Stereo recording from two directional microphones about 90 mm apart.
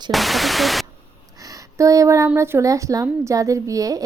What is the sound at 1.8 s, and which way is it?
Speech, 35° right (ahead or behind).